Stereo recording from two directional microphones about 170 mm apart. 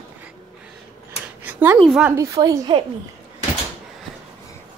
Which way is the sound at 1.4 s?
10° right (ahead or behind).